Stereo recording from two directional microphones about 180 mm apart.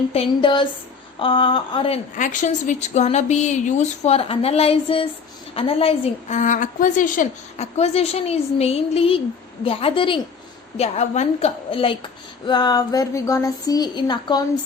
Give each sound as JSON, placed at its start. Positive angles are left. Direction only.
{"t": 0.1, "sound": "a woman's voice", "side_deg": 30}
{"t": 2.1, "sound": "a woman's voice", "side_deg": 45}